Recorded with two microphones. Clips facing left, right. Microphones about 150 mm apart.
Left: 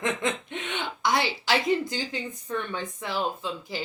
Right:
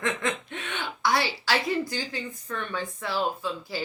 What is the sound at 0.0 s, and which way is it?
A woman's voice, 20° left (ahead or behind).